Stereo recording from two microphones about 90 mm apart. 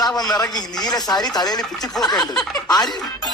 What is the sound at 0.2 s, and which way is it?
Speech, 45° left (ahead or behind).